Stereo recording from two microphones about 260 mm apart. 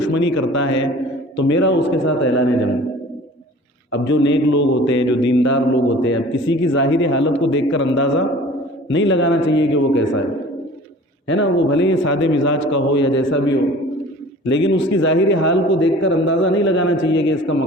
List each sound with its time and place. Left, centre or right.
0.0 s a man's voice: left
4.1 s a man's voice: left
11.3 s a man's voice: left